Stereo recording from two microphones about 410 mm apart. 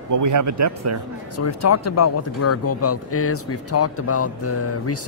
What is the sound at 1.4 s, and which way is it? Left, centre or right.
Speech, left.